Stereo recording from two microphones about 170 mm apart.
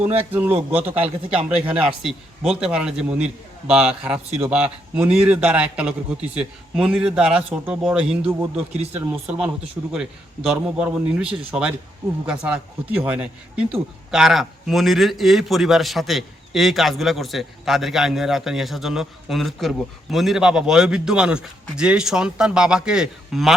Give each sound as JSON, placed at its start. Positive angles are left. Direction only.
{"t": 0.1, "sound": "a man's voice", "side_deg": -35}
{"t": 0.7, "sound": "a man's voice", "side_deg": -10}